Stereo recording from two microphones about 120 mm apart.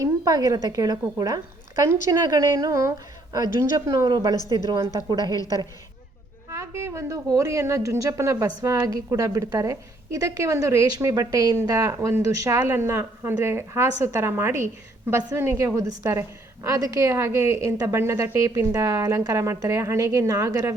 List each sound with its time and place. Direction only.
0.0 s a woman's voice: 30° right (ahead or behind)
6.5 s a woman's voice: 25° right (ahead or behind)